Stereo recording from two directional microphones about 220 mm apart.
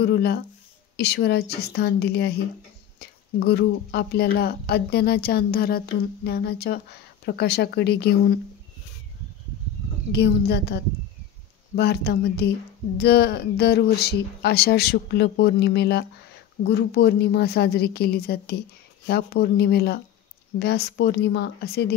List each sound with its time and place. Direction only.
0.0 s speech: 45° left (ahead or behind)
10.1 s speech: 50° left (ahead or behind)